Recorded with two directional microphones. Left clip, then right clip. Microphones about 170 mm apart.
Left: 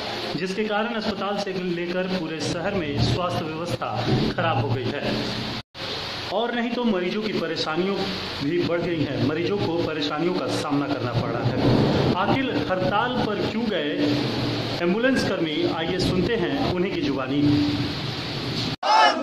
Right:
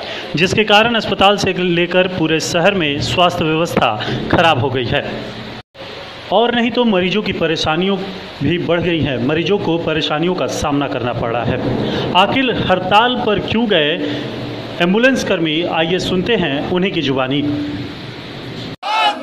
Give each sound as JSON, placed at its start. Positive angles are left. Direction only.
{"t": 0.4, "sound": "a man's voice", "side_deg": -50}
{"t": 6.3, "sound": "a man's voice", "side_deg": -40}